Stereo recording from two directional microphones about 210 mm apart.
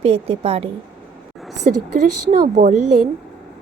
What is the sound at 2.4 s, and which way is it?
Speech, 35° right (ahead or behind).